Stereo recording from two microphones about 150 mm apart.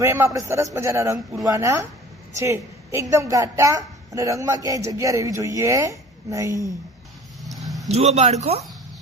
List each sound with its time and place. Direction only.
0.0 s a man's voice: 15° right (ahead or behind)
7.4 s vehicle: centre (ahead or behind)
7.9 s a man's voice: 45° right (ahead or behind)